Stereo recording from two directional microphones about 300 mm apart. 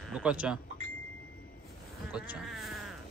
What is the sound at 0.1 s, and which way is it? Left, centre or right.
Speech, centre.